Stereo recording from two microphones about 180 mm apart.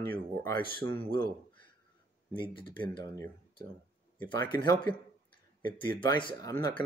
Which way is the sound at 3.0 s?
25° left (ahead or behind).